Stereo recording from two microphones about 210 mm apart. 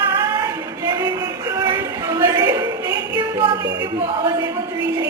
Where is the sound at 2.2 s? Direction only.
15° right (ahead or behind).